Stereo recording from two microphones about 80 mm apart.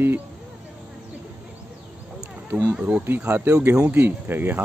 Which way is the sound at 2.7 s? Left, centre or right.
Centre.